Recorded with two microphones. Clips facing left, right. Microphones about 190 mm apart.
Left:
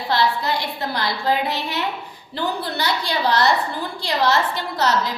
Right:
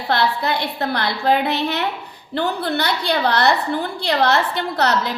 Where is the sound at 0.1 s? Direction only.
60° right (ahead or behind).